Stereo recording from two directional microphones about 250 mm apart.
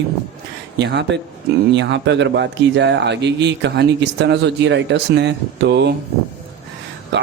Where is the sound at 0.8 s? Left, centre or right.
Right.